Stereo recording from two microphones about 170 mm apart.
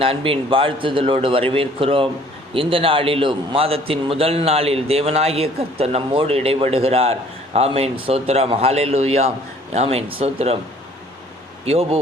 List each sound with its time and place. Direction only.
0.0 s a man's voice: 35° right (ahead or behind)
11.6 s a man's voice: 35° right (ahead or behind)